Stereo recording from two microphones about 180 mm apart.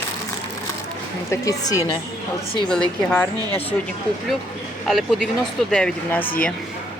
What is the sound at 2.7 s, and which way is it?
Speech, 10° left (ahead or behind).